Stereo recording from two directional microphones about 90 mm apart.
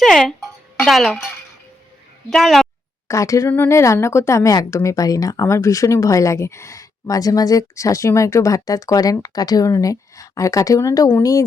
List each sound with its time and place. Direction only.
0.0 s music: 5° left (ahead or behind)
0.9 s speech: centre (ahead or behind)
2.3 s speech: centre (ahead or behind)
3.1 s a woman's voice: 35° left (ahead or behind)